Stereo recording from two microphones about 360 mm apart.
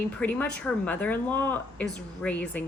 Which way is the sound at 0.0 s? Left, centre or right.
Centre.